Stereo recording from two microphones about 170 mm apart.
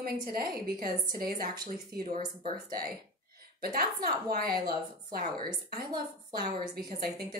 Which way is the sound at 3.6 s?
60° right (ahead or behind).